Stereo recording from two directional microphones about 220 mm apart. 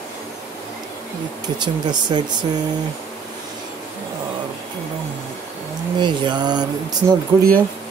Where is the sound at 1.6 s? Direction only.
20° right (ahead or behind).